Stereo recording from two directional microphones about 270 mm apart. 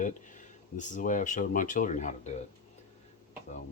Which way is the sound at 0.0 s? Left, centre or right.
Left.